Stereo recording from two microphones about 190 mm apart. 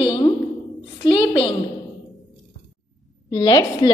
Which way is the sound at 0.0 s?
25° left (ahead or behind).